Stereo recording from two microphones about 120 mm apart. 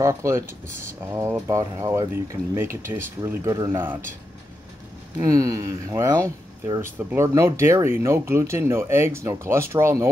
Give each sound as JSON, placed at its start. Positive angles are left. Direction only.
{"t": 0.0, "sound": "speech", "side_deg": -25}
{"t": 5.2, "sound": "speech", "side_deg": -30}